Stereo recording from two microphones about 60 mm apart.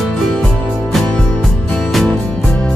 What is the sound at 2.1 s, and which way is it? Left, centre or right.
Music, centre.